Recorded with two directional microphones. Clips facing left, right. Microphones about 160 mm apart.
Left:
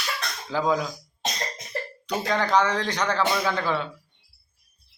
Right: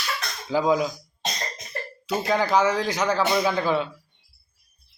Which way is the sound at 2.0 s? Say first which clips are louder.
Right 3 dB; 10° right (ahead or behind).